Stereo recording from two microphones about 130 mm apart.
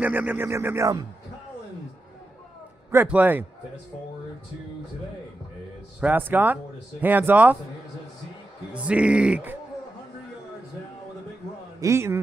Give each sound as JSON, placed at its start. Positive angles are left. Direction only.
{"t": 0.0, "sound": "speech", "side_deg": -15}
{"t": 3.1, "sound": "speech", "side_deg": -15}
{"t": 5.9, "sound": "speech", "side_deg": -15}
{"t": 8.7, "sound": "speech", "side_deg": -10}
{"t": 11.8, "sound": "a man's voice", "side_deg": -20}